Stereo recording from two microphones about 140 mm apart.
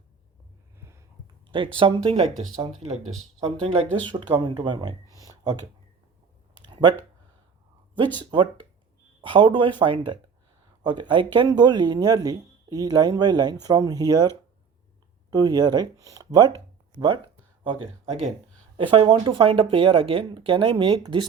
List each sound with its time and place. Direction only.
1.5 s speech: 35° right (ahead or behind)
3.4 s speech: 50° right (ahead or behind)
4.1 s speech: 35° right (ahead or behind)
5.1 s a sound: 25° right (ahead or behind)
6.7 s a sound: 35° right (ahead or behind)
8.2 s speech: 35° right (ahead or behind)
15.3 s speech: 30° right (ahead or behind)